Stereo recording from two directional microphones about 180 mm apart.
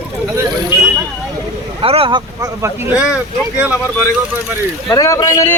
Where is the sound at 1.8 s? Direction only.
30° right (ahead or behind); by 3.8 s 10° right (ahead or behind).